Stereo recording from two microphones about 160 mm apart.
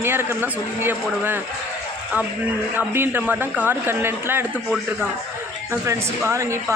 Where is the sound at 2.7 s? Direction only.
15° right (ahead or behind).